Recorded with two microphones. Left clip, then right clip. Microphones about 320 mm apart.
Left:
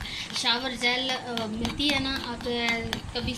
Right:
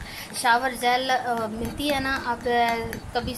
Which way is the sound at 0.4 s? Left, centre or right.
Centre.